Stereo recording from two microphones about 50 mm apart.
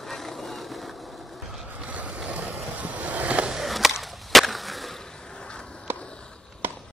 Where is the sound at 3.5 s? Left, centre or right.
Centre.